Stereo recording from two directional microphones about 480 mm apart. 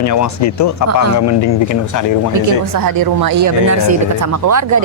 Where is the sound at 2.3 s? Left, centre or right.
Right.